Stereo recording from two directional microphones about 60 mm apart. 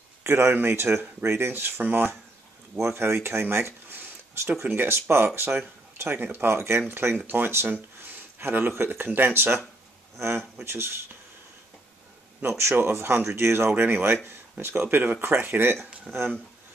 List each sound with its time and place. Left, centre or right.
0.2 s speech: right
1.8 s speech: right
2.8 s speech: right
6.4 s speech: right
7.6 s a sound: right
8.4 s speech: right
12.4 s speech: right
15.8 s a sound: centre